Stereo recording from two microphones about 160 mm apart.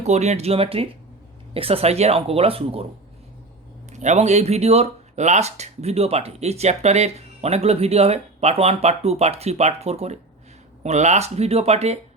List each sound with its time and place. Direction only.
0.0 s speech: 45° right (ahead or behind)
3.9 s speech: 45° right (ahead or behind)